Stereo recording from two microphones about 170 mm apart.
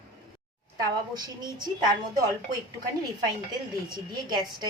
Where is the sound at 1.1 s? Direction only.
25° right (ahead or behind).